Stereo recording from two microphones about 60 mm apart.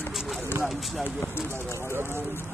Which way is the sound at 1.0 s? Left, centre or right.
Left.